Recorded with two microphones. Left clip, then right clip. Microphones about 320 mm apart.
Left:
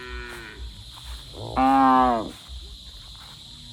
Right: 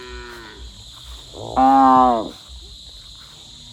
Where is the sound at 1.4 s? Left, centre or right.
Right.